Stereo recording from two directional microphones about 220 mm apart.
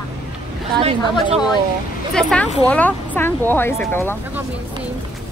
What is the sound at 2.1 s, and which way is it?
Speech, 5° left (ahead or behind).